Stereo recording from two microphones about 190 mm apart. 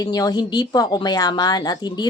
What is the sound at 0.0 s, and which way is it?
A woman's voice, 20° left (ahead or behind).